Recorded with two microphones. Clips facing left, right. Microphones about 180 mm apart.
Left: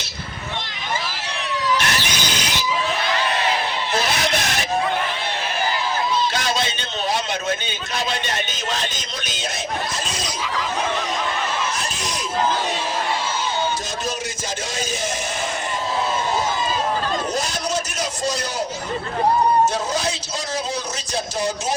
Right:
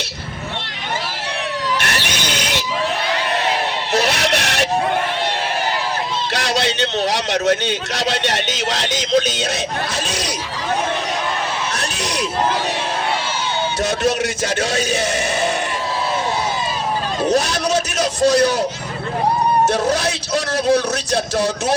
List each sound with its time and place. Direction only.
1.8 s squeal: 65° right (ahead or behind)
3.9 s a sound: 70° right (ahead or behind)
6.3 s a man's voice: 70° right (ahead or behind)
14.7 s a man's voice: 70° right (ahead or behind)
17.2 s a man's voice: 70° right (ahead or behind)
19.9 s a man's voice: 70° right (ahead or behind)